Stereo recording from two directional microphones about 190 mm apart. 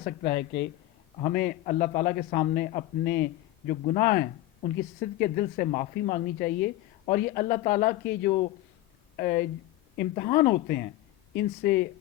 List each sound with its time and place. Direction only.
0.0 s speech: 55° left (ahead or behind)
1.3 s speech: 55° left (ahead or behind)